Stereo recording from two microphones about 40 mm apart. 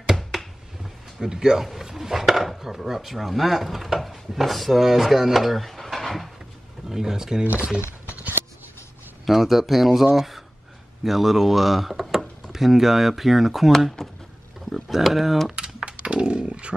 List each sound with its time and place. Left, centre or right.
0.0 s a sound: centre
1.2 s speech: centre
6.9 s speech: centre
7.4 s speech: right
9.2 s speech: centre
14.7 s speech: centre
15.5 s a sound: right